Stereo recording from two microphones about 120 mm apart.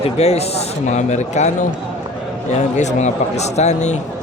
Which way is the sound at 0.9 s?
75° left (ahead or behind).